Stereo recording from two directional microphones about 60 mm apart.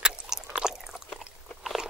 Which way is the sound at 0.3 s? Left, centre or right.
Centre.